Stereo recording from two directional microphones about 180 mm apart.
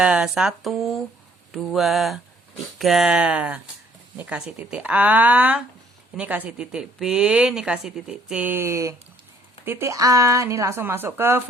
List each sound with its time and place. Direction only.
0.0 s a woman's voice: 5° right (ahead or behind)